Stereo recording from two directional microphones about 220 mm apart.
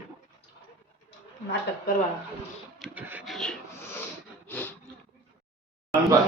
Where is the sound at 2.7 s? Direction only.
5° right (ahead or behind).